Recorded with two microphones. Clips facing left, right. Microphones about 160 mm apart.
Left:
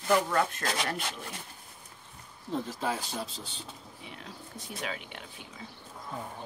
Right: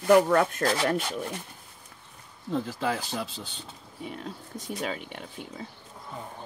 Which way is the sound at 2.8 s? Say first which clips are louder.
Right 3 dB; 70° right (ahead or behind).